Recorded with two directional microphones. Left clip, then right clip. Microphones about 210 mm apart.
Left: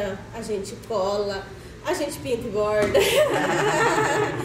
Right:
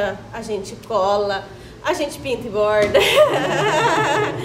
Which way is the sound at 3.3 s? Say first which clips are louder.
Right 3 dB; 45° right (ahead or behind).